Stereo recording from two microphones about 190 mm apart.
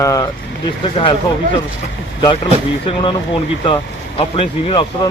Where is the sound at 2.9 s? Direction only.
25° left (ahead or behind).